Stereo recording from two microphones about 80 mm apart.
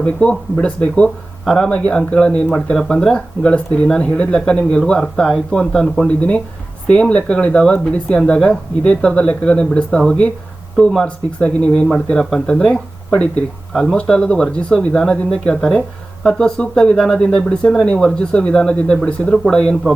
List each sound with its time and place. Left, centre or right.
0.0 s speech: centre
1.5 s speech: centre
1.7 s speech: centre
13.9 s speech: centre